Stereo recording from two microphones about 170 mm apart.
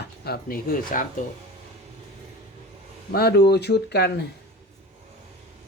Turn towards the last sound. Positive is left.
turn(degrees=75)  # may be behind; listen again after turning